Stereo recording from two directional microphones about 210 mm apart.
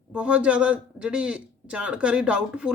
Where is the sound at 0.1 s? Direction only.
5° right (ahead or behind).